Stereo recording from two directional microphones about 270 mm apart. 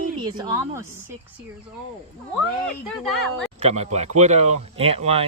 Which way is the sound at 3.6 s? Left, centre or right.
Right.